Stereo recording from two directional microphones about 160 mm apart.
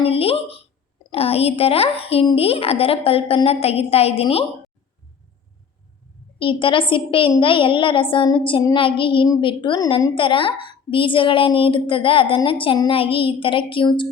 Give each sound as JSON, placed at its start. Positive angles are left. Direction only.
{"t": 0.0, "sound": "a sound", "side_deg": 35}
{"t": 1.1, "sound": "a woman's voice", "side_deg": 40}
{"t": 6.4, "sound": "a woman's voice", "side_deg": 30}